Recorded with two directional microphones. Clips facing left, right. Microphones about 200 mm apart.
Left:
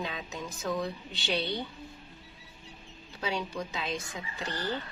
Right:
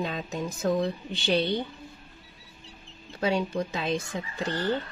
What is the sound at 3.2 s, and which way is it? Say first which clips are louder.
Speech: right 7 dB; 50° right (ahead or behind).